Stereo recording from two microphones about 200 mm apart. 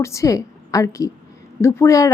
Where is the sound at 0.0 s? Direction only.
15° left (ahead or behind).